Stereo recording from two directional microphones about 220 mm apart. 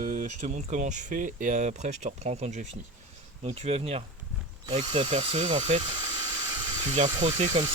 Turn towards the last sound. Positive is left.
turn(degrees=-30)  # may be behind; listen again after turning